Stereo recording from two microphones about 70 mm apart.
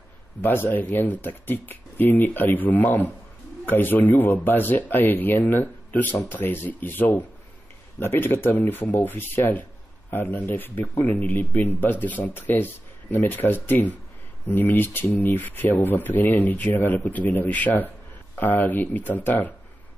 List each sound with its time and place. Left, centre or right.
0.4 s speech: left